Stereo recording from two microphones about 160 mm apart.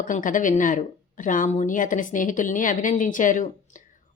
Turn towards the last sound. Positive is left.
turn(degrees=55)  # may be behind; listen again after turning